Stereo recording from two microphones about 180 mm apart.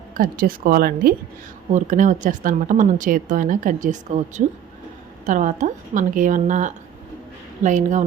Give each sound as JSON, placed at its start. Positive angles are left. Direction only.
{"t": 0.2, "sound": "speech", "side_deg": -50}
{"t": 1.7, "sound": "speech", "side_deg": -45}